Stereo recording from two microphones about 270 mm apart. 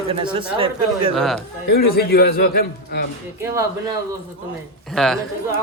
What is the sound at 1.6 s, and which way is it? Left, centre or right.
A man's voice, left.